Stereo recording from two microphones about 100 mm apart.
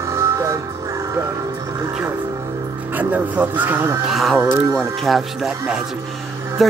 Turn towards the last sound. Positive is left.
turn(degrees=0)  # may be behind; listen again after turning